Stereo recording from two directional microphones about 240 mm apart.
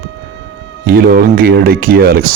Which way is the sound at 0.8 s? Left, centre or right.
Right.